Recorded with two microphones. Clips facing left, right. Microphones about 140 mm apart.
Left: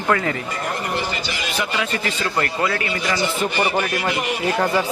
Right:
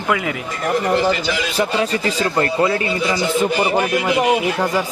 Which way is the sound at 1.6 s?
35° right (ahead or behind).